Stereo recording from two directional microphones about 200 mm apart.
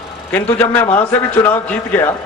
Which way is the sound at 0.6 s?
10° left (ahead or behind).